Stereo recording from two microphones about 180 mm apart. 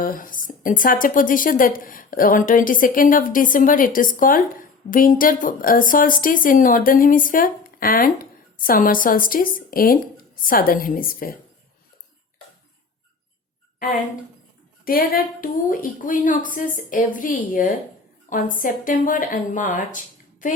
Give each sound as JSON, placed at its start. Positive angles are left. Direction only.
{"t": 0.0, "sound": "a woman's voice", "side_deg": 50}
{"t": 14.8, "sound": "a woman's voice", "side_deg": 55}